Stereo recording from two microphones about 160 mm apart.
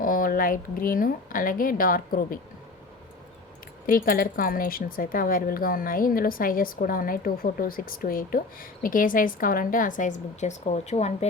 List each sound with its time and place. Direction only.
0.0 s speech: 60° left (ahead or behind)
3.8 s speech: 60° left (ahead or behind); by 11.3 s 45° left (ahead or behind)